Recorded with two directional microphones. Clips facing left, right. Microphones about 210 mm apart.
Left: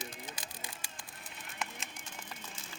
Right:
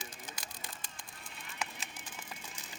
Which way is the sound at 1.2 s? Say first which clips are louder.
Even; centre (ahead or behind).